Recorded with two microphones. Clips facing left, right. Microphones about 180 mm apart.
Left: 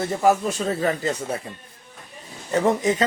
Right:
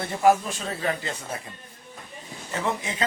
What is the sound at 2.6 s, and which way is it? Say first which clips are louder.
Speech: left 8 dB; 40° left (ahead or behind).